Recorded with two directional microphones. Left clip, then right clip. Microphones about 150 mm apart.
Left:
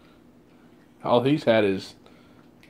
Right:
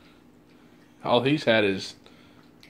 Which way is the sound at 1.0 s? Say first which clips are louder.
Left 1 dB; 20° left (ahead or behind).